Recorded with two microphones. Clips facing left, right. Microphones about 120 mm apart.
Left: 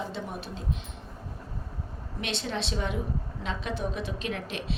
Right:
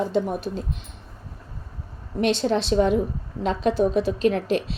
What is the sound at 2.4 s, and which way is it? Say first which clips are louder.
A woman's voice: right 11 dB; 40° right (ahead or behind).